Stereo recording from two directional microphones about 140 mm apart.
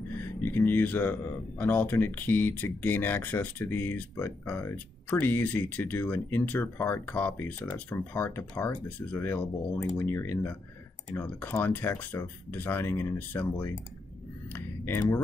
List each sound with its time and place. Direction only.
0.2 s speech: 15° left (ahead or behind)